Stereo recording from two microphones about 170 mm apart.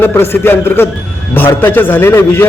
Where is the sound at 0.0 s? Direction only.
10° left (ahead or behind).